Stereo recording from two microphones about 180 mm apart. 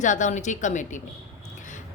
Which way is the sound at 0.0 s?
45° left (ahead or behind).